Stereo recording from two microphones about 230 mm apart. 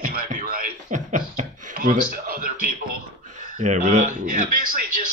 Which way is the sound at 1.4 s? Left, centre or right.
Right.